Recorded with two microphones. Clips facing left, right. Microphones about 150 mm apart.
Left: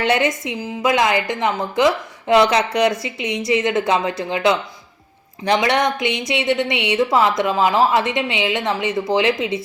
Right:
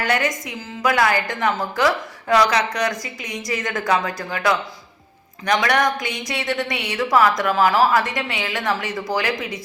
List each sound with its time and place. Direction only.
0.0 s a woman's voice: 25° left (ahead or behind)